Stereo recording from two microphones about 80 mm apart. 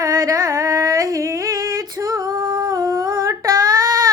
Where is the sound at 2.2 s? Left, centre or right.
Right.